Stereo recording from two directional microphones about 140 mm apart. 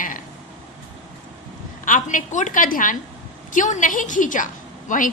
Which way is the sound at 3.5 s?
65° left (ahead or behind).